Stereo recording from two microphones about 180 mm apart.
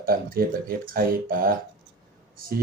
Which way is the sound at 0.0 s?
55° right (ahead or behind).